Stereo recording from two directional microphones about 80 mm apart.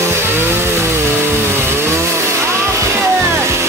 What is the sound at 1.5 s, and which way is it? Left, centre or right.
Vehicle, right.